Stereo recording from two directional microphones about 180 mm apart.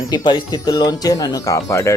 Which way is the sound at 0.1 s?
25° left (ahead or behind).